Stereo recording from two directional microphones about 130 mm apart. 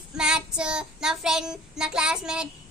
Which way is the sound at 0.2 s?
5° right (ahead or behind).